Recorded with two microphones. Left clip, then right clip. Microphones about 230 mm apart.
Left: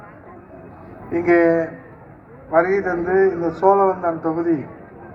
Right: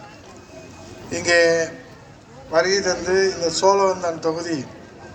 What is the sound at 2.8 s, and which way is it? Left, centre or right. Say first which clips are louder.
Speech: left 2 dB; right.